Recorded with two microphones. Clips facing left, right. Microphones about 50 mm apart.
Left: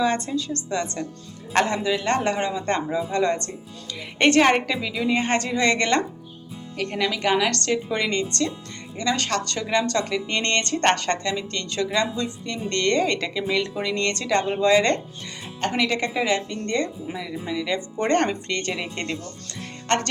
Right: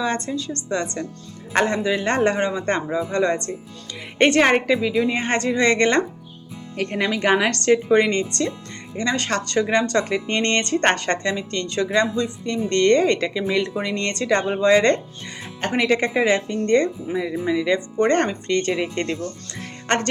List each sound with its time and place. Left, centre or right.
0.0 s a woman's voice: centre
1.9 s speech: centre
6.9 s a woman's voice: right; by 14.9 s centre
15.6 s a woman's voice: centre
18.6 s speech: centre
19.1 s speech: right